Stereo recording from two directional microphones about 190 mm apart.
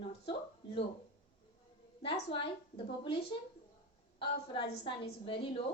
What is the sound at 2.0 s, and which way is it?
A woman's voice, 30° left (ahead or behind).